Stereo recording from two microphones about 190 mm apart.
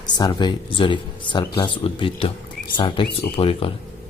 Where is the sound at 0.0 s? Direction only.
20° left (ahead or behind).